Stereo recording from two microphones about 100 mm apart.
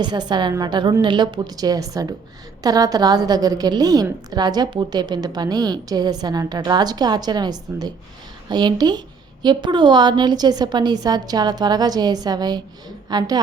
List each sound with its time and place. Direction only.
0.0 s a woman's voice: 45° right (ahead or behind)